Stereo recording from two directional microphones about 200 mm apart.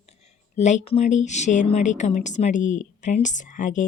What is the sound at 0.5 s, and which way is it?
A woman's voice, 35° left (ahead or behind).